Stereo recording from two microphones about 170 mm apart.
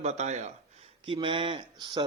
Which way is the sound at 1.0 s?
30° right (ahead or behind).